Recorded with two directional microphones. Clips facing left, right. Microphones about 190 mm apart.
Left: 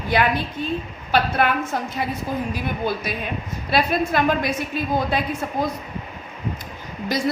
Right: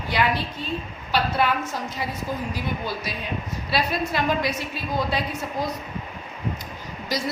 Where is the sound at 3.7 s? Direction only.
50° left (ahead or behind).